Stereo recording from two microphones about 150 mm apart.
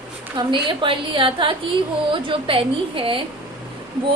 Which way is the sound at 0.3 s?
35° right (ahead or behind).